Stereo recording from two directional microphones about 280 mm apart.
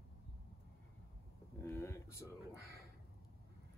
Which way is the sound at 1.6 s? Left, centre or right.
Centre.